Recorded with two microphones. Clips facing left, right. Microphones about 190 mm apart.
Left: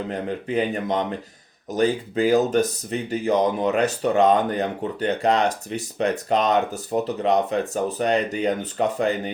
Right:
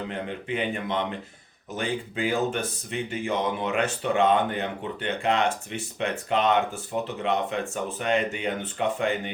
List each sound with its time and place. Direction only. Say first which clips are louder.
0.1 s speech: left 5 dB; 40° left (ahead or behind)